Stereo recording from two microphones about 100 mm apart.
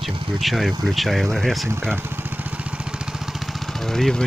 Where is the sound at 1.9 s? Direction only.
20° right (ahead or behind).